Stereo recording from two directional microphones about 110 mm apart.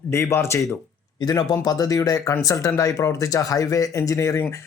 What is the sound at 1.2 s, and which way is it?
A man's voice, 35° left (ahead or behind).